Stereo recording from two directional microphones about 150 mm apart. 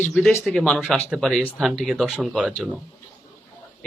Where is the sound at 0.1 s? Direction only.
Centre (ahead or behind).